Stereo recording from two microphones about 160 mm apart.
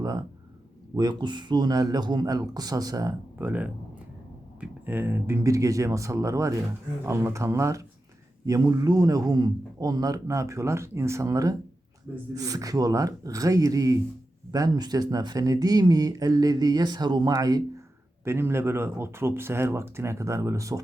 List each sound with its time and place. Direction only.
0.9 s speech: 30° right (ahead or behind)